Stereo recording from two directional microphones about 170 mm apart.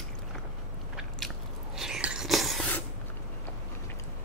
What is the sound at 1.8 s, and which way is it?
Whispering, 5° right (ahead or behind).